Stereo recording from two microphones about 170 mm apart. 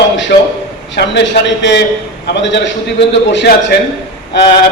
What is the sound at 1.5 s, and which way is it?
A man's voice, 90° left.